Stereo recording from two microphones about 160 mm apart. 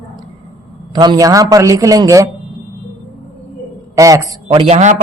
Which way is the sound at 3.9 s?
20° right (ahead or behind).